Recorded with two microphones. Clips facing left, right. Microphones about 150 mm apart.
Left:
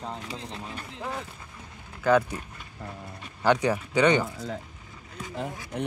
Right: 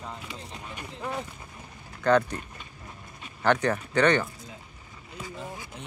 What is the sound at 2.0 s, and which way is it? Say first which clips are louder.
Speech: even; 5° left (ahead or behind).